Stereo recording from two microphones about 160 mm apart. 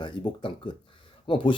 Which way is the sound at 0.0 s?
30° left (ahead or behind).